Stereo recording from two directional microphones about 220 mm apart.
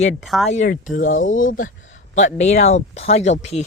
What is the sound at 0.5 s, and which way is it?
Speech, 35° left (ahead or behind).